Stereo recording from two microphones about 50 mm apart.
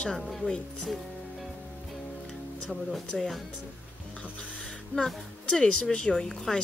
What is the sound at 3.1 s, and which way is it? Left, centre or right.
Speech, centre.